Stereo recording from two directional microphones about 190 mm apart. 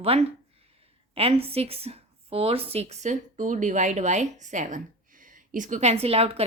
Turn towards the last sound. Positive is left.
turn(degrees=-30)  # may be behind; listen again after turning